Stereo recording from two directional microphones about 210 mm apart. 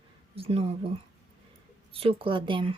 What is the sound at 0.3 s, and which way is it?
Speech, 25° right (ahead or behind).